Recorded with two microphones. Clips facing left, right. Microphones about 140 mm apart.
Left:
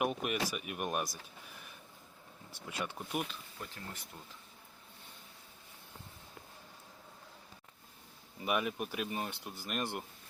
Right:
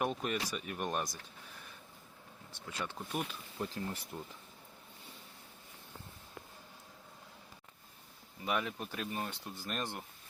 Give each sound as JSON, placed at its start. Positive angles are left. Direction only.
{"t": 0.0, "sound": "speech", "side_deg": 10}
{"t": 2.6, "sound": "speech", "side_deg": 15}
{"t": 3.6, "sound": "speech", "side_deg": -30}
{"t": 8.4, "sound": "speech", "side_deg": 15}